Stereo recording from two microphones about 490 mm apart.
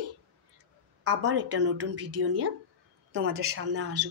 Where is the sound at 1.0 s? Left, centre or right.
Right.